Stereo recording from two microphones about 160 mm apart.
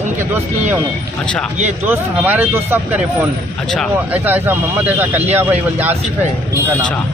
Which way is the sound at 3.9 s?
10° right (ahead or behind).